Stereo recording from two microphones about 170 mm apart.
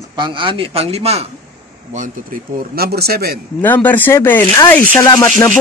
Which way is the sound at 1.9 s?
50° right (ahead or behind).